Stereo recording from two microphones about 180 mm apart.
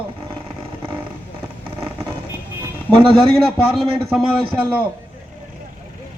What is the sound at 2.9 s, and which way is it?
Speech, 30° right (ahead or behind).